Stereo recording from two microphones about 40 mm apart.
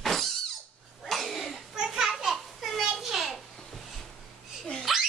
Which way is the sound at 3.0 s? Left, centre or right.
Centre.